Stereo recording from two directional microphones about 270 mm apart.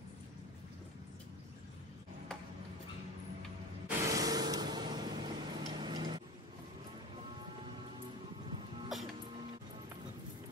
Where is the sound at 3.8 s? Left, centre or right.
Centre.